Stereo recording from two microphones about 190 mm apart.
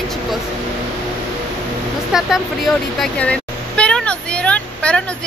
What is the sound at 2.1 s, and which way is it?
Speech, centre (ahead or behind).